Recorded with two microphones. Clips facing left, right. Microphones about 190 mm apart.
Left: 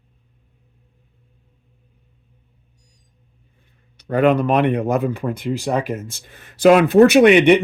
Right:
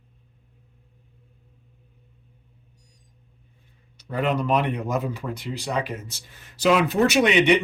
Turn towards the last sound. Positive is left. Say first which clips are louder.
# left 8 dB
turn(degrees=55)  # may be behind; listen again after turning